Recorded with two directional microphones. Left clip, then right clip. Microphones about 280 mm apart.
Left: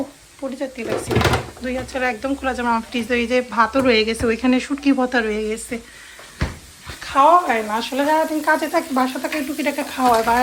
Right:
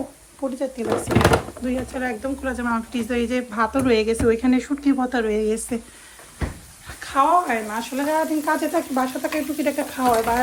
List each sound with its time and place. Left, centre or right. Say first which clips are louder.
0.4 s speech: right 1 dB; centre
7.0 s speech: left 4 dB; centre